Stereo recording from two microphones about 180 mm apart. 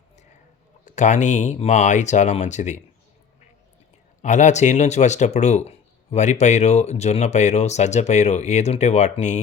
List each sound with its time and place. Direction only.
0.9 s speech: 40° left (ahead or behind)
4.2 s speech: 40° left (ahead or behind)